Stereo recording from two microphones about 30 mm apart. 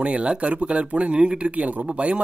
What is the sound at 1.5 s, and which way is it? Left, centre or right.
Speech, right.